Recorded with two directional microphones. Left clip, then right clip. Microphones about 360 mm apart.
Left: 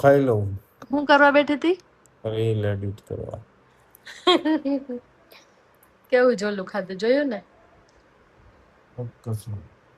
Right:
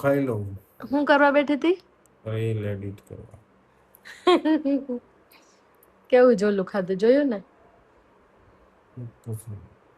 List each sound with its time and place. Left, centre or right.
0.0 s speech: centre
2.3 s speech: centre
4.0 s speech: centre
6.1 s speech: centre